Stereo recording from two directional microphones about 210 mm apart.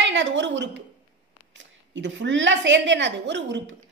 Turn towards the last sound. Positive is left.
turn(degrees=-55)  # may be behind; listen again after turning